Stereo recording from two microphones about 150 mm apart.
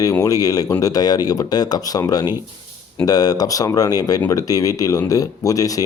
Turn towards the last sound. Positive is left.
turn(degrees=25)  # may be behind; listen again after turning